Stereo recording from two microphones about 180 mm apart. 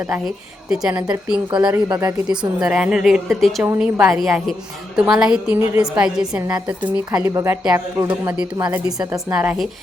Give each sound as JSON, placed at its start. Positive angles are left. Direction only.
{"t": 0.1, "sound": "a woman's voice", "side_deg": 0}
{"t": 1.9, "sound": "speech", "side_deg": -20}
{"t": 2.3, "sound": "a woman's voice", "side_deg": -5}